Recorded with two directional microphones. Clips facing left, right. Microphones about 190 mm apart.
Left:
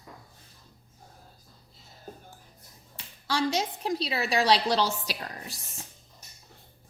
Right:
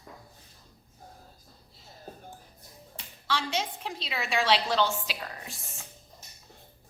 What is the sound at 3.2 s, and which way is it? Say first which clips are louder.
A woman's voice: left 4 dB; 40° left (ahead or behind).